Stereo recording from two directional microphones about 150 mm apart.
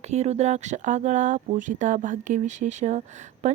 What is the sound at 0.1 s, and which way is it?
Speech, 45° right (ahead or behind).